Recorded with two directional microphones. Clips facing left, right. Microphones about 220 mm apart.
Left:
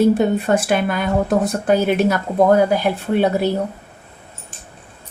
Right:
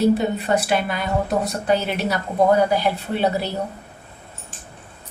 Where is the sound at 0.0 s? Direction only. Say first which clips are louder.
Left 4 dB; 50° left (ahead or behind).